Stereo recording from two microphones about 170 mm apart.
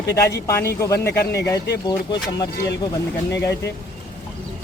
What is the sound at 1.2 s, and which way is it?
Speech, 75° left (ahead or behind).